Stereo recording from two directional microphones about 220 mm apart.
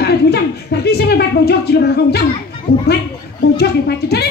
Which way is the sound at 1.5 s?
45° left (ahead or behind).